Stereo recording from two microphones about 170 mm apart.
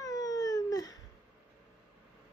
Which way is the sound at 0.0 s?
20° left (ahead or behind).